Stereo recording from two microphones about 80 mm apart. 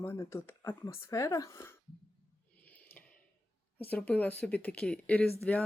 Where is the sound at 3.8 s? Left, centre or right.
Centre.